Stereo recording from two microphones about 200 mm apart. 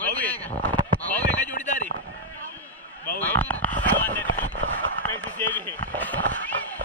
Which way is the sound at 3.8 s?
10° left (ahead or behind).